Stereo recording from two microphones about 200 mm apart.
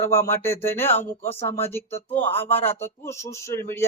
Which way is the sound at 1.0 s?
30° left (ahead or behind).